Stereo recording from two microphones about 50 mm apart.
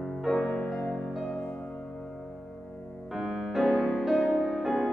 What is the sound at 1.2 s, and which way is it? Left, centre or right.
Music, left.